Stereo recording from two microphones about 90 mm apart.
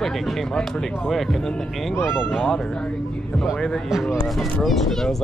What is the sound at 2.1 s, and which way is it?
Speech, 5° right (ahead or behind).